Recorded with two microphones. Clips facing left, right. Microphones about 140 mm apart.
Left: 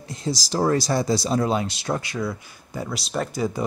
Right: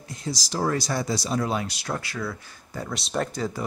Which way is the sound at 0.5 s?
35° left (ahead or behind).